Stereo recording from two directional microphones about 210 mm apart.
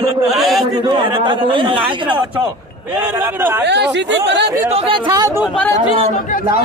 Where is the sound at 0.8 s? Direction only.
25° right (ahead or behind).